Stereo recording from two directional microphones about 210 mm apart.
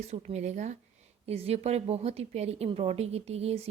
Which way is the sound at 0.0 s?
30° right (ahead or behind).